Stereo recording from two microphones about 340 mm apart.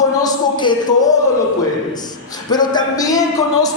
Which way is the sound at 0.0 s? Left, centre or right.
Centre.